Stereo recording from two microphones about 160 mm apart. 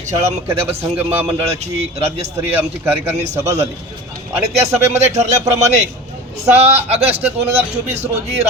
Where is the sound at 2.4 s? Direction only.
15° right (ahead or behind).